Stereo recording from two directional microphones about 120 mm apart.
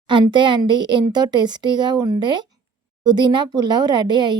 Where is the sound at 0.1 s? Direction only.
40° right (ahead or behind).